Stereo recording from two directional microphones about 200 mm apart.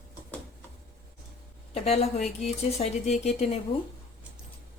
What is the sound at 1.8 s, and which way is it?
Speech, 35° left (ahead or behind).